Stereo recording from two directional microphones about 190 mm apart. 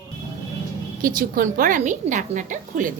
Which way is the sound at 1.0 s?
50° right (ahead or behind).